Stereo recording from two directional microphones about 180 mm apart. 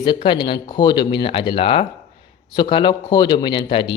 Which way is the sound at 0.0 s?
25° left (ahead or behind).